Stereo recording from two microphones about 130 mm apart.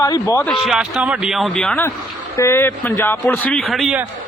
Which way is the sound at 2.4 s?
20° left (ahead or behind).